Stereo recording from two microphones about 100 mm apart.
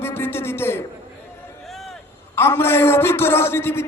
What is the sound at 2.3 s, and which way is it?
A man's voice, 25° left (ahead or behind).